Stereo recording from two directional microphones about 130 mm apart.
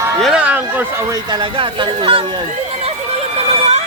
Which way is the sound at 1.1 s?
35° right (ahead or behind).